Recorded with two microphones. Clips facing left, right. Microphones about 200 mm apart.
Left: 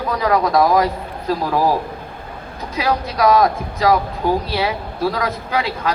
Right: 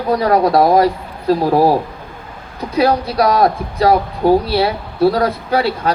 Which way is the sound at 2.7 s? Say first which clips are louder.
Right 5 dB; 35° right (ahead or behind).